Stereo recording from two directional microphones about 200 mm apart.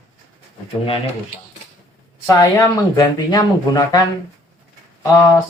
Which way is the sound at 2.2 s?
15° left (ahead or behind).